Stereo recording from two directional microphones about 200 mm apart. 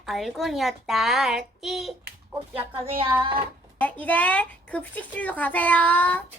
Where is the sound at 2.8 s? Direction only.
30° right (ahead or behind).